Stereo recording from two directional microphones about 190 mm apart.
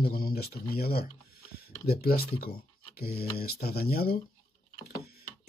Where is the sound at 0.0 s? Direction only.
50° left (ahead or behind).